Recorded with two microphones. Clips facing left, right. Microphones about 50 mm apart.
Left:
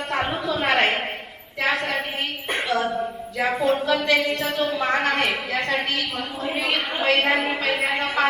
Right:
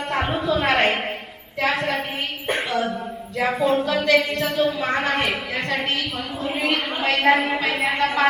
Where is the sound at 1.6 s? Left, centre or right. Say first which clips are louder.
Right 1 dB; centre.